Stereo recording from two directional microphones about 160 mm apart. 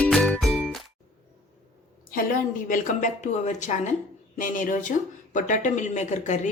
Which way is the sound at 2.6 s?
55° left (ahead or behind).